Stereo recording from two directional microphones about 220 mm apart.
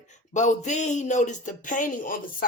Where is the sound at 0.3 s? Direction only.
35° left (ahead or behind).